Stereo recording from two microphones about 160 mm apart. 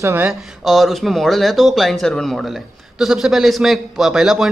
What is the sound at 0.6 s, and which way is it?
A man's voice, centre (ahead or behind).